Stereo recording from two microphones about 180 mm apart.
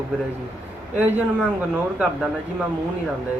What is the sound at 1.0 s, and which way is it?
Speech, 10° right (ahead or behind).